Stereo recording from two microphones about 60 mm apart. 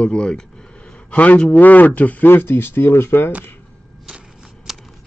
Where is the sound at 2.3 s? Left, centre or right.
Left.